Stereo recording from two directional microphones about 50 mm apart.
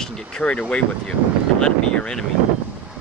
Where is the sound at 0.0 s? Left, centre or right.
Centre.